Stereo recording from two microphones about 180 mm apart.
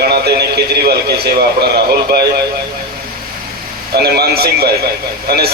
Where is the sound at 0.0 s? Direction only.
65° right (ahead or behind).